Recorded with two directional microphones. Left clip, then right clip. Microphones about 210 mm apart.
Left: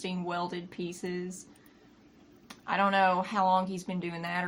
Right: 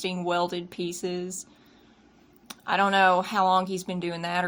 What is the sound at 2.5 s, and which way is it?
Speech, 55° right (ahead or behind).